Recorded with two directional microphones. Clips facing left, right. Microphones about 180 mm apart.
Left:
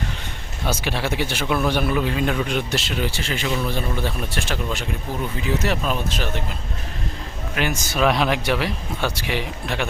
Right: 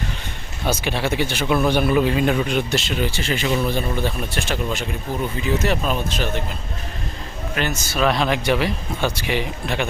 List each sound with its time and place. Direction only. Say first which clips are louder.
0.6 s speech: right 2 dB; centre (ahead or behind)
7.5 s speech: even; 10° left (ahead or behind)